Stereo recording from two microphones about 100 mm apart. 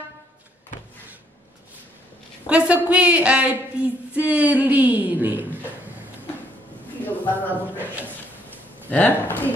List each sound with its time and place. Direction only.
2.4 s a woman's voice: 10° right (ahead or behind)
7.2 s a man's voice: 20° left (ahead or behind)